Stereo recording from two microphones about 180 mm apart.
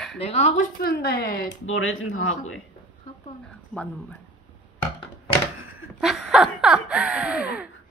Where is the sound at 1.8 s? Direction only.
90° left.